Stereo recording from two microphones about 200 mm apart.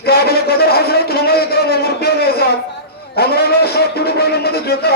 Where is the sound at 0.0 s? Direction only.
50° left (ahead or behind).